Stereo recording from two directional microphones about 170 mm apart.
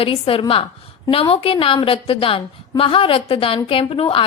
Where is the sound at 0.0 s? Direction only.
35° left (ahead or behind).